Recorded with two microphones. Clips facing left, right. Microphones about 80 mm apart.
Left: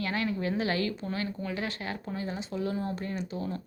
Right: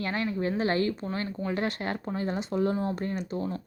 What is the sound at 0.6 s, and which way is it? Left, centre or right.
Speech, right.